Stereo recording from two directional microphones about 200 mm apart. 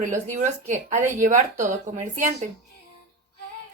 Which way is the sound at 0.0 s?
40° right (ahead or behind).